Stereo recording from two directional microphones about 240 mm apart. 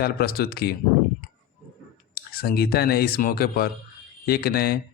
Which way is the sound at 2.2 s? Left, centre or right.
Left.